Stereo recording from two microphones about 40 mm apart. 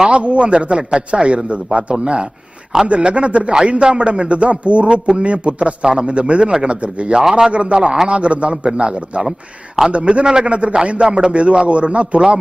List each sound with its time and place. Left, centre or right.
0.0 s a man's voice: right
7.2 s speech: centre
7.5 s a man's voice: right
9.8 s a man's voice: centre; by 12.4 s right